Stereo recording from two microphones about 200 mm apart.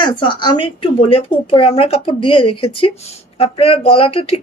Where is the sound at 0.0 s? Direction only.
25° left (ahead or behind).